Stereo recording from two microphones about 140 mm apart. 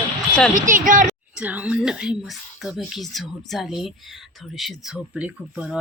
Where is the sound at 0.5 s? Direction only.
70° right (ahead or behind).